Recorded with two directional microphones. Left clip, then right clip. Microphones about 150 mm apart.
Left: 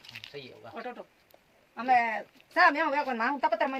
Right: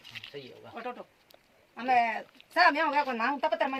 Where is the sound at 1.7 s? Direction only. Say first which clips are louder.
Left 1 dB; 25° right (ahead or behind).